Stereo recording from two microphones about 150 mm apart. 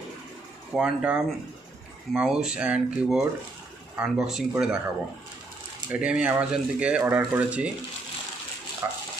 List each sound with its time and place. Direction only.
0.7 s speech: 5° right (ahead or behind)
8.8 s dog: 20° right (ahead or behind)